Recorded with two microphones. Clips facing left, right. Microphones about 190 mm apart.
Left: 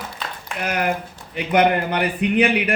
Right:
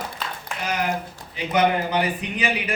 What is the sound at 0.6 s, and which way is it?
A man's voice, 60° left (ahead or behind).